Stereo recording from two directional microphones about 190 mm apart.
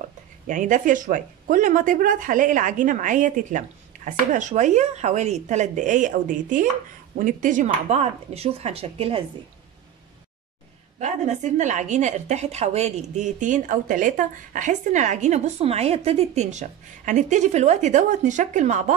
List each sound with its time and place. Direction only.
0.5 s a woman's voice: 40° right (ahead or behind)
11.0 s a woman's voice: 40° right (ahead or behind)